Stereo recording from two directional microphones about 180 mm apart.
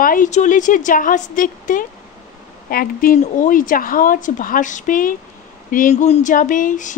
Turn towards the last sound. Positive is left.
turn(degrees=45)  # may be behind; listen again after turning